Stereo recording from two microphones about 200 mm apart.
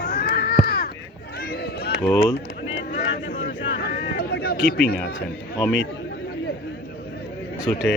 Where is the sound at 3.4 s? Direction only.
55° left (ahead or behind).